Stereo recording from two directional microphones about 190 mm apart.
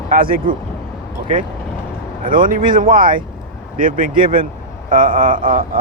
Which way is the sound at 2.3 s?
45° right (ahead or behind).